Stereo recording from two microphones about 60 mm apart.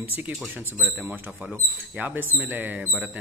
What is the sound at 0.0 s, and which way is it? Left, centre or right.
Speech, right.